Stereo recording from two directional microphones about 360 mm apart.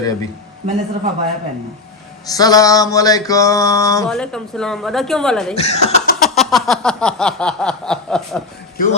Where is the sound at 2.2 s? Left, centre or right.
Centre.